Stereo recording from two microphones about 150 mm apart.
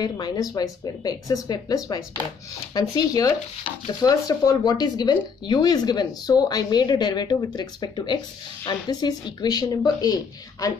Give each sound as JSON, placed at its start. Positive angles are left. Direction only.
{"t": 0.0, "sound": "speech", "side_deg": 25}